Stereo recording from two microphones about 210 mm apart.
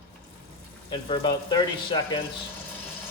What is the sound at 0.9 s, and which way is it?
Speech, 25° left (ahead or behind).